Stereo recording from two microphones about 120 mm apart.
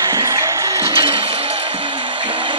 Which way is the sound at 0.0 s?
25° right (ahead or behind).